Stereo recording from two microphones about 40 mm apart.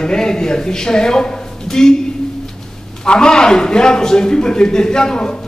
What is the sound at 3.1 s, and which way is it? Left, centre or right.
A man's voice, centre.